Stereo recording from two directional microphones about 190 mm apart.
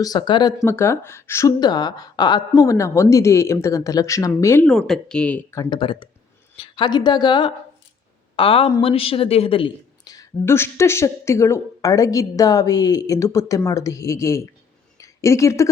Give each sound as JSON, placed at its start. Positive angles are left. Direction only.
{"t": 0.0, "sound": "speech", "side_deg": 20}
{"t": 5.7, "sound": "a woman's voice", "side_deg": 25}
{"t": 14.9, "sound": "a sound", "side_deg": 15}